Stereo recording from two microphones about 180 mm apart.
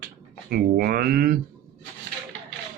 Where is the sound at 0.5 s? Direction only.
55° right (ahead or behind).